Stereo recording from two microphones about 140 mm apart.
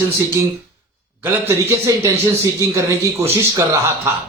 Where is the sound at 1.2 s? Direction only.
20° right (ahead or behind).